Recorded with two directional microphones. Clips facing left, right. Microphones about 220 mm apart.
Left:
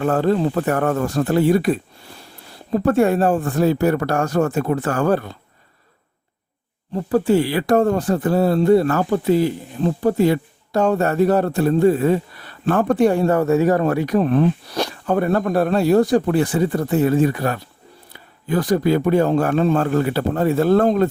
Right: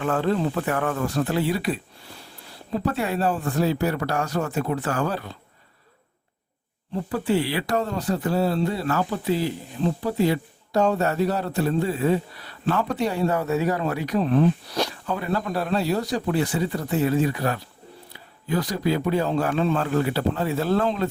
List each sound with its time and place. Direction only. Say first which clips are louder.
0.0 s speech: left 5 dB; 40° left (ahead or behind)
6.9 s speech: left 7 dB; 45° left (ahead or behind)